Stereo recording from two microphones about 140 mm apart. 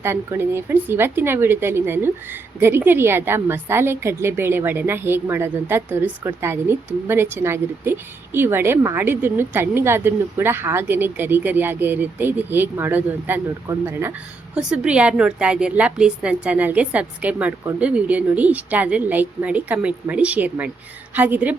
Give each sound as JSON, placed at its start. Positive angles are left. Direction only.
{"t": 0.0, "sound": "a woman's voice", "side_deg": -20}